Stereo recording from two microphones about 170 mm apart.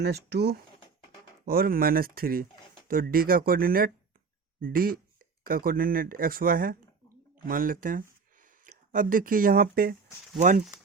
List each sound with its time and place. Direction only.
0.0 s speech: 75° right (ahead or behind)
1.5 s speech: 60° right (ahead or behind)
10.3 s speech: 45° right (ahead or behind)